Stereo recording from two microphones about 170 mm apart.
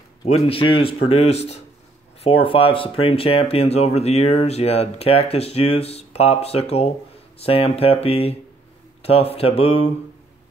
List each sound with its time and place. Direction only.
0.2 s speech: 30° left (ahead or behind)